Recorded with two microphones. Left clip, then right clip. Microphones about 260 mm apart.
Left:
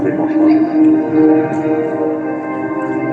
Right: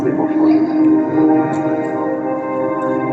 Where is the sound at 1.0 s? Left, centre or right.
Left.